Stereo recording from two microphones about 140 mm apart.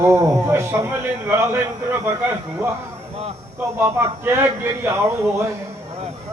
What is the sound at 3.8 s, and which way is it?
A man's voice, 15° right (ahead or behind).